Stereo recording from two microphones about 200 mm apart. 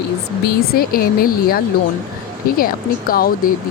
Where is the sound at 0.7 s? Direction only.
50° left (ahead or behind).